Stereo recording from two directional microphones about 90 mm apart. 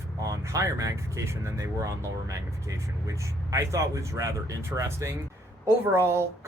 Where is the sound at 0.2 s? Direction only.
35° right (ahead or behind).